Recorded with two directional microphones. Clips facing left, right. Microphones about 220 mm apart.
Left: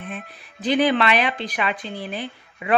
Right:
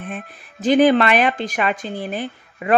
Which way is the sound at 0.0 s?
50° right (ahead or behind).